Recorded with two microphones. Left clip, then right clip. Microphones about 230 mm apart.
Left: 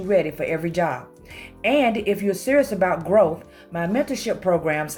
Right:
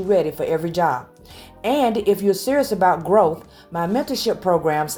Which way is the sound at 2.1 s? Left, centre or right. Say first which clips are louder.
Right 3 dB; right.